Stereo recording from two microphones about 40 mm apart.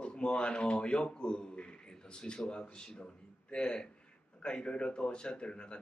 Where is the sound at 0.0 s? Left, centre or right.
Left.